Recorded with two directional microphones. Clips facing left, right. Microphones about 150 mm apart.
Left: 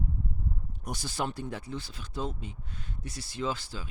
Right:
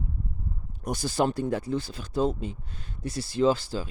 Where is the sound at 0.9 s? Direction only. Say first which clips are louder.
Right 8 dB; 40° right (ahead or behind).